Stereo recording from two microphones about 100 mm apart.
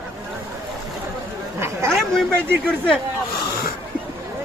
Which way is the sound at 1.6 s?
25° right (ahead or behind).